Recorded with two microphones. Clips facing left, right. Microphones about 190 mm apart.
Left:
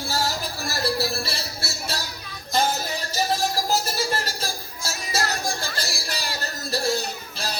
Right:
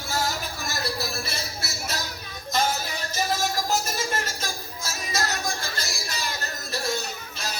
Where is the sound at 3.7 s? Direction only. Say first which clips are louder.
Left 2 dB; 35° left (ahead or behind).